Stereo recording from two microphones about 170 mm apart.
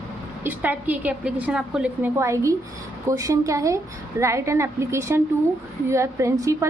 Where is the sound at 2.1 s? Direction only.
15° right (ahead or behind).